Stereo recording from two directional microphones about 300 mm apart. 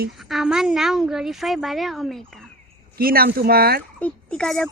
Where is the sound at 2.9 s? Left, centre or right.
Right.